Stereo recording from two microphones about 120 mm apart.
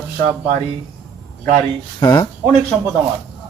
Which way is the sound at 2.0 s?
35° left (ahead or behind).